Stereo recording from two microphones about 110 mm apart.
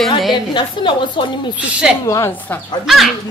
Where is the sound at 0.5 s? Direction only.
45° left (ahead or behind).